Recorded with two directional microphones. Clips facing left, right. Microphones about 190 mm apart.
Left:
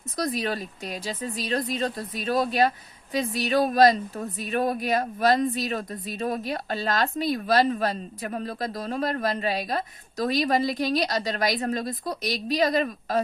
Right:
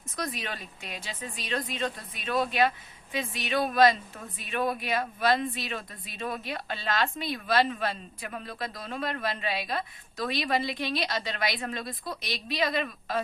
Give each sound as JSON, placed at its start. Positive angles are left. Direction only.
{"t": 0.2, "sound": "speech", "side_deg": 35}